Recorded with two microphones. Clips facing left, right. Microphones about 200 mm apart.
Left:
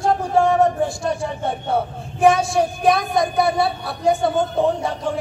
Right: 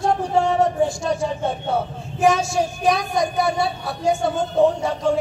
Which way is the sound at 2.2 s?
55° left (ahead or behind).